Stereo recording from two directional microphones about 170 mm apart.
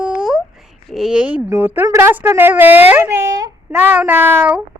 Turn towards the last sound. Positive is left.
turn(degrees=-10)  # may be behind; listen again after turning